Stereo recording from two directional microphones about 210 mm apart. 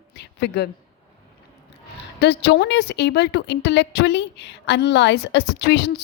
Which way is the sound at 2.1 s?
55° left (ahead or behind).